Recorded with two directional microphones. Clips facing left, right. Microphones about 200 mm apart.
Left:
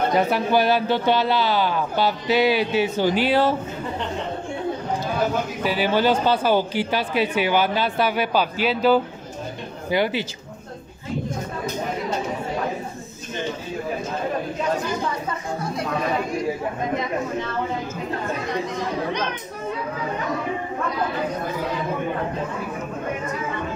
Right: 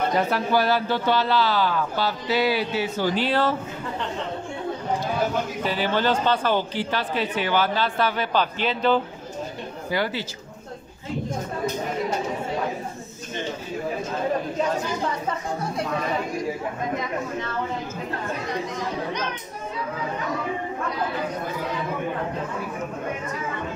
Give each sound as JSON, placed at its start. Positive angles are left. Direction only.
{"t": 0.3, "sound": "speech", "side_deg": 20}
{"t": 5.6, "sound": "speech", "side_deg": 10}
{"t": 9.8, "sound": "speech", "side_deg": 20}